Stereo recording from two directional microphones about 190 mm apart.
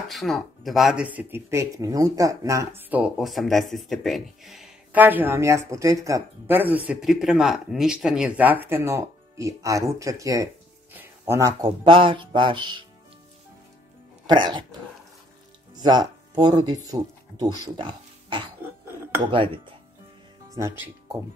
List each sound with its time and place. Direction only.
0.1 s speech: centre (ahead or behind); by 12.8 s 25° right (ahead or behind)
14.2 s speech: 25° right (ahead or behind)
20.4 s speech: 15° right (ahead or behind)